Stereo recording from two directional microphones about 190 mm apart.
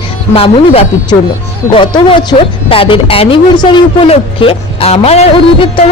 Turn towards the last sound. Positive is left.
turn(degrees=30)  # may be behind; listen again after turning